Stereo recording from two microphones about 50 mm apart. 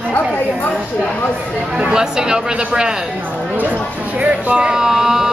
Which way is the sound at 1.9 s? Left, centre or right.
Centre.